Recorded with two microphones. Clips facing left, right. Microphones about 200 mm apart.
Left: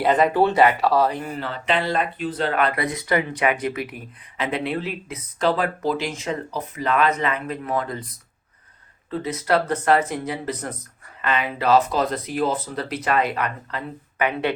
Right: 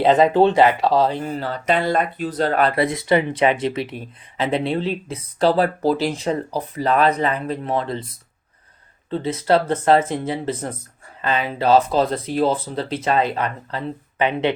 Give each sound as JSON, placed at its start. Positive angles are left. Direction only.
{"t": 0.0, "sound": "speech", "side_deg": -25}
{"t": 9.0, "sound": "speech", "side_deg": -30}